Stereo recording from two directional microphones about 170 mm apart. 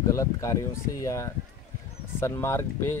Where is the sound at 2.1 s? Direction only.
15° left (ahead or behind).